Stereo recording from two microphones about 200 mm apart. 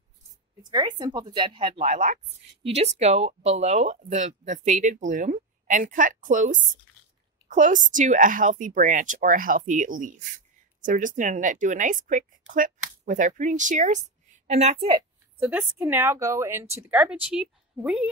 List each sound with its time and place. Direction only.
0.6 s speech: 20° right (ahead or behind)
15.3 s a woman's voice: 10° right (ahead or behind)